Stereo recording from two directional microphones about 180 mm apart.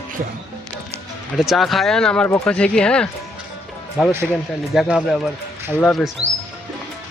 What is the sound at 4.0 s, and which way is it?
Speech, 5° right (ahead or behind).